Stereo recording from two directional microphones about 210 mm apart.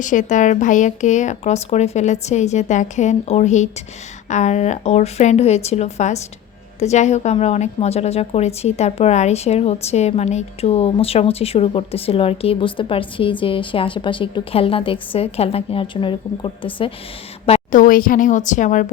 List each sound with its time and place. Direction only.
0.0 s a woman's voice: 35° left (ahead or behind)